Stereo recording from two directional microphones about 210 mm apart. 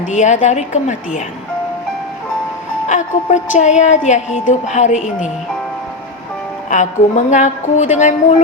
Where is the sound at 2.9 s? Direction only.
35° left (ahead or behind).